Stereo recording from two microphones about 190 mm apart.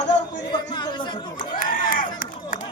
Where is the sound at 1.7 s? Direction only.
45° left (ahead or behind).